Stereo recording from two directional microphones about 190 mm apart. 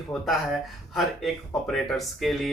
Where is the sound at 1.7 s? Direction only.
Centre (ahead or behind).